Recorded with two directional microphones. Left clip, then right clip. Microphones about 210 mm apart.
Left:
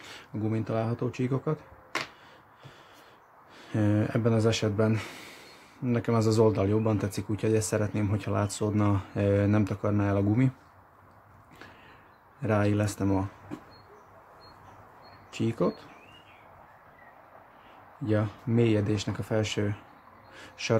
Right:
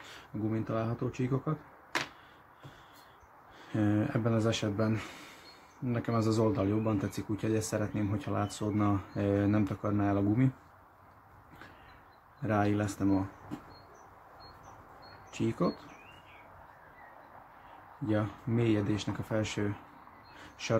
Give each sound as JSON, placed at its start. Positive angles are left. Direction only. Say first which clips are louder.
{"t": 0.1, "sound": "speech", "louder": "left 3 dB", "side_deg": 40}
{"t": 3.6, "sound": "speech", "louder": "left 3 dB", "side_deg": 40}
{"t": 12.4, "sound": "speech", "louder": "left 3 dB", "side_deg": 40}
{"t": 15.3, "sound": "speech", "louder": "left 4 dB", "side_deg": 35}
{"t": 18.0, "sound": "speech", "louder": "left 3 dB", "side_deg": 35}